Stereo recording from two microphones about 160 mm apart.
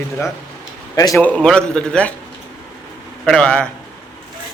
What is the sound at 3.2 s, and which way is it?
Speech, 5° left (ahead or behind).